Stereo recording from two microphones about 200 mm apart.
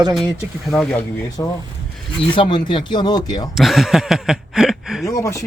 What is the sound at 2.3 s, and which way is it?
Speech, 25° left (ahead or behind).